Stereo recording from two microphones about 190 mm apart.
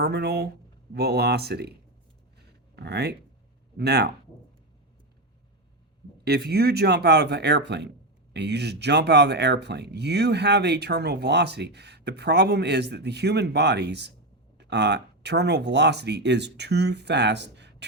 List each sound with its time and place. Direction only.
0.0 s speech: 60° right (ahead or behind)
2.7 s speech: 60° right (ahead or behind)
6.2 s speech: 60° right (ahead or behind)